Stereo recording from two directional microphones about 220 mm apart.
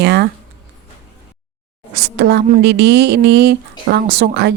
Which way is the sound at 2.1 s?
50° right (ahead or behind).